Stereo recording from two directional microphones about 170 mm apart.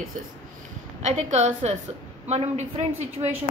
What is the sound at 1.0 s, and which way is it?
A woman's voice, 40° right (ahead or behind).